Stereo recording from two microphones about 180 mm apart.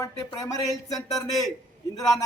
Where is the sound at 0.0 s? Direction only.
20° left (ahead or behind).